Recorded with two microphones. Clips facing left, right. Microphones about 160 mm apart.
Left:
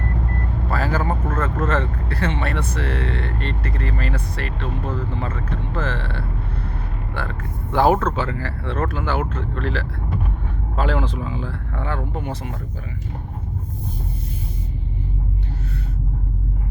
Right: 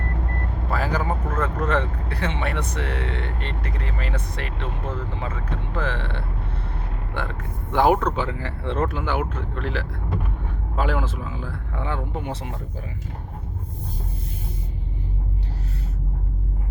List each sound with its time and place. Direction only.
0.7 s speech: 15° right (ahead or behind)